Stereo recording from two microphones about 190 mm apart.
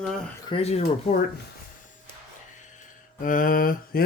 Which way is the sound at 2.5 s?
45° left (ahead or behind).